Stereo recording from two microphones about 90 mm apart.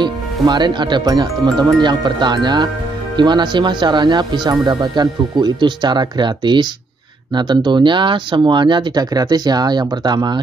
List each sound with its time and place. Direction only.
0.0 s speech: 55° right (ahead or behind)